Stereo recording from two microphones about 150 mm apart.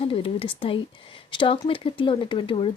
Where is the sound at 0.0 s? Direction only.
40° left (ahead or behind).